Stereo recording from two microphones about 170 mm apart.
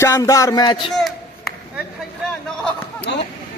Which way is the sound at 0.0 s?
15° left (ahead or behind).